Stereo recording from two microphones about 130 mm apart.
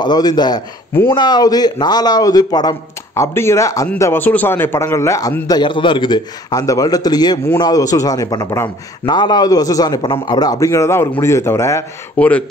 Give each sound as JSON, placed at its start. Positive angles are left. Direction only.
{"t": 0.0, "sound": "a man's voice", "side_deg": 30}
{"t": 12.2, "sound": "speech", "side_deg": 10}